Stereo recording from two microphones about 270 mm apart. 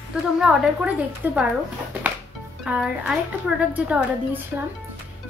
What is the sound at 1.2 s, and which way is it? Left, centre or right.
Speech, centre.